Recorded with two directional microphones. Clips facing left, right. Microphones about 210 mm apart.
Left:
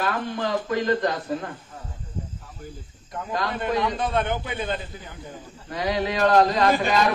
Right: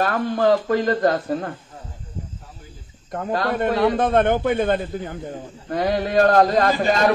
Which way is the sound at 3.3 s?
55° right (ahead or behind).